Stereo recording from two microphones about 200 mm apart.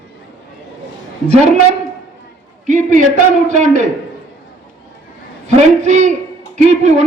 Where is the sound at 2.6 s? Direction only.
40° right (ahead or behind).